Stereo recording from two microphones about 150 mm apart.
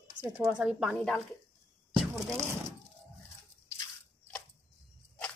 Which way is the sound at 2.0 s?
Centre (ahead or behind).